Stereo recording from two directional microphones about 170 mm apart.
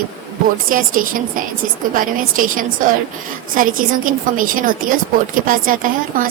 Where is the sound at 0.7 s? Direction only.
55° right (ahead or behind).